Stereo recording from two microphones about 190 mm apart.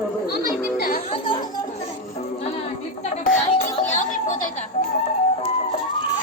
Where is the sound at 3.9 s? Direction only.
40° left (ahead or behind).